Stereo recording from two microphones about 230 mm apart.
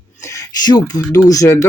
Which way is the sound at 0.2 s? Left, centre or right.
Centre.